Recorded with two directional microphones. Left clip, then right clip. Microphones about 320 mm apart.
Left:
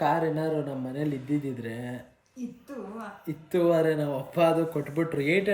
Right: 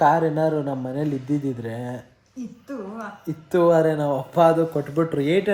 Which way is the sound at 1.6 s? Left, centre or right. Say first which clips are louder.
Right 6 dB; centre.